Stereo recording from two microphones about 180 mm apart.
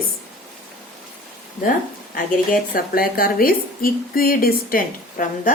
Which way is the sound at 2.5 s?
55° left (ahead or behind).